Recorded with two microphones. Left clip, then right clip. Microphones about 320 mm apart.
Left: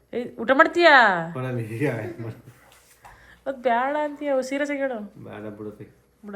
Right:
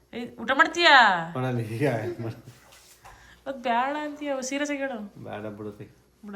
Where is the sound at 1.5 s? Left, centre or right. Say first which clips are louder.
Right 1 dB; centre.